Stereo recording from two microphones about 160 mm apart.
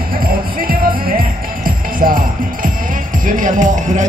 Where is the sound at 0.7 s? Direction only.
65° right (ahead or behind).